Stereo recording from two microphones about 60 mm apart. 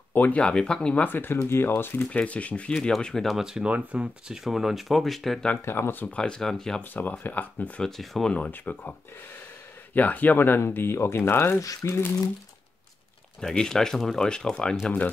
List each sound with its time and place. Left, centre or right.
0.1 s speech: left
0.4 s speech: centre
1.0 s speech: left
2.0 s speech: left
2.9 s speech: centre
3.3 s speech: centre
5.5 s speech: left
6.0 s speech: centre
6.8 s speech: left
7.8 s speech: centre
8.5 s speech: left
9.9 s speech: left
11.8 s speech: left
13.4 s speech: centre